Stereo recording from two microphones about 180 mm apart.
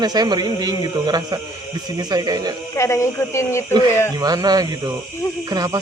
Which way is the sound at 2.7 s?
15° left (ahead or behind).